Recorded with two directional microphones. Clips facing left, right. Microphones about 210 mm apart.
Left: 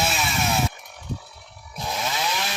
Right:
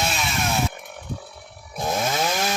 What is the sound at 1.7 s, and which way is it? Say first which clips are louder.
Chainsaw: right 5 dB; 50° right (ahead or behind).